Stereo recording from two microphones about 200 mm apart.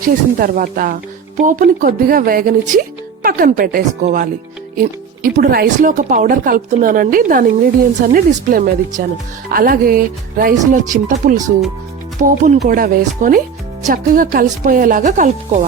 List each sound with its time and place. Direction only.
0.0 s speech: 45° right (ahead or behind)